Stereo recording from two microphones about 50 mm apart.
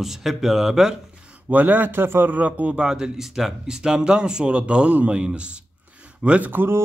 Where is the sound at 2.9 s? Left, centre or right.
Centre.